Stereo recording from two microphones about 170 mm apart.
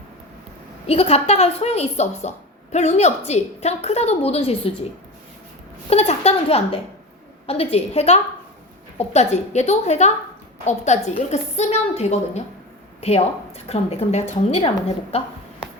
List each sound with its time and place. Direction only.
0.9 s a woman's voice: 35° left (ahead or behind)
5.9 s a woman's voice: 40° left (ahead or behind)